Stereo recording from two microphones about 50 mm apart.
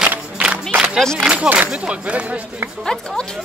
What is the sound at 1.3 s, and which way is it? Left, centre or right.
Speech, right.